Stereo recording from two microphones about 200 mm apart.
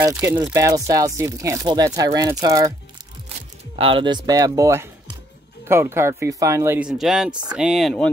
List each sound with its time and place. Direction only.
0.0 s speech: 10° right (ahead or behind)
3.7 s speech: 25° right (ahead or behind); by 8.1 s centre (ahead or behind)